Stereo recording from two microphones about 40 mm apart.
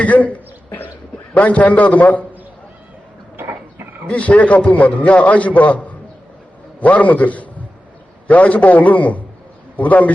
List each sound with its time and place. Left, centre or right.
0.0 s a man's voice: left
3.3 s a sound: right
4.1 s a man's voice: left